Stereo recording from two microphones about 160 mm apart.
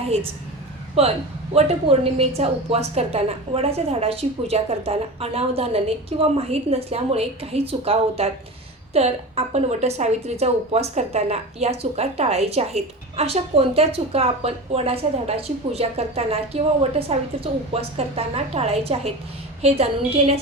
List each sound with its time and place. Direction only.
1.0 s a woman's voice: 40° right (ahead or behind)